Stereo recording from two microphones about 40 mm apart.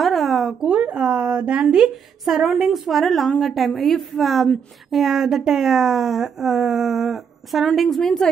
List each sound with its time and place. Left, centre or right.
0.0 s a sound: centre
0.7 s speech: right
2.2 s a woman's voice: centre